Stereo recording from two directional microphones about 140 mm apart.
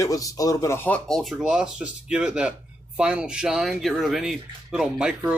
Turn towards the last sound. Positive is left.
turn(degrees=-5)  # may be behind; listen again after turning